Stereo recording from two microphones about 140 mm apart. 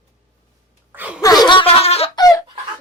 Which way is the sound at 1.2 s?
25° left (ahead or behind).